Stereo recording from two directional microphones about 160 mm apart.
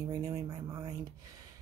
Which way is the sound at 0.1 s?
25° right (ahead or behind).